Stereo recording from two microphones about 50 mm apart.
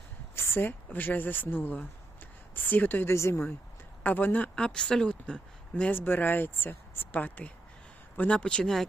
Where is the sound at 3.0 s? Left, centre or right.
Left.